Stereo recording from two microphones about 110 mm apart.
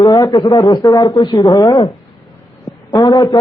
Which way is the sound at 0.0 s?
35° left (ahead or behind).